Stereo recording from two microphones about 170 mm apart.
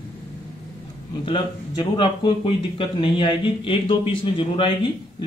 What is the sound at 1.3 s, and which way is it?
Speech, 30° left (ahead or behind).